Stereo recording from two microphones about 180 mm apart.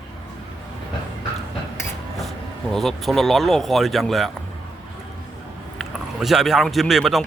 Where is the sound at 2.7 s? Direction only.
Centre (ahead or behind).